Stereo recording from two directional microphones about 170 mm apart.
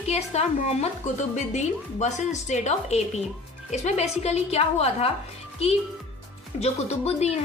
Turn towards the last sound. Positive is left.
turn(degrees=40)  # may be behind; listen again after turning